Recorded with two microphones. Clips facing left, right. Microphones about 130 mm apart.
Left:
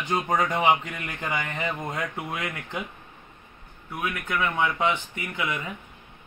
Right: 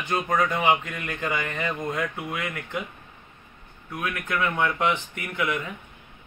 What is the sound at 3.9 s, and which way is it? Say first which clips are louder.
Speech: even; 15° left (ahead or behind).